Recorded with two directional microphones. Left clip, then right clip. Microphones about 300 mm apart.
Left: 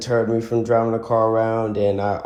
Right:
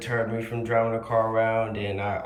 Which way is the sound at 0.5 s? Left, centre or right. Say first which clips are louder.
Left 11 dB; right.